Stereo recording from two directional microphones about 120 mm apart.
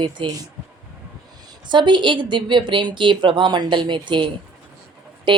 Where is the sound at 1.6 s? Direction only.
40° right (ahead or behind).